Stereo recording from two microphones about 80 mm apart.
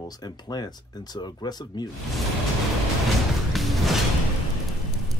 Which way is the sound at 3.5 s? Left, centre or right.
Centre.